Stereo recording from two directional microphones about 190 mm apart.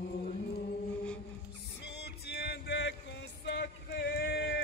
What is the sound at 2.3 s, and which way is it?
Music, 60° left (ahead or behind).